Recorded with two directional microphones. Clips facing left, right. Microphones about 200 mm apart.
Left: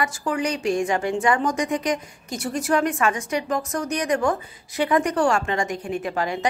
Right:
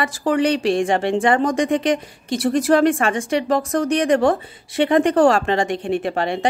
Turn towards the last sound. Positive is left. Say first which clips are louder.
# right 4 dB
turn(degrees=-30)  # may be behind; listen again after turning